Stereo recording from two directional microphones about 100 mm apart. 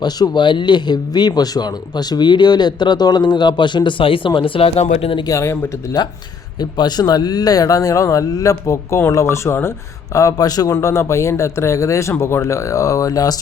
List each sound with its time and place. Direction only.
0.0 s speech: 50° left (ahead or behind); by 5.2 s 75° left (ahead or behind)
5.3 s speech: 30° left (ahead or behind)
6.6 s speech: 45° left (ahead or behind); by 9.7 s 25° left (ahead or behind)
10.2 s speech: 35° left (ahead or behind)